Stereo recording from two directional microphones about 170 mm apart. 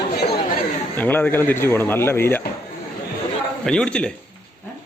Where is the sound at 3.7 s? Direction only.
5° left (ahead or behind).